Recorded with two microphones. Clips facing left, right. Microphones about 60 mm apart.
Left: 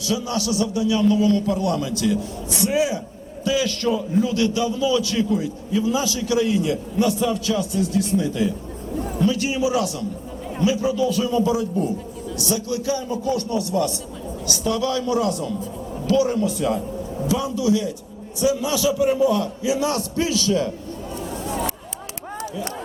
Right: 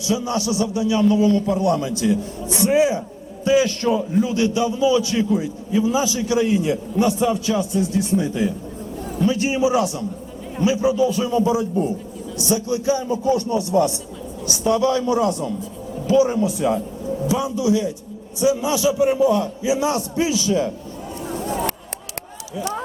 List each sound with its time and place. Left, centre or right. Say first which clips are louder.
0.1 s a man's voice: right 2 dB; right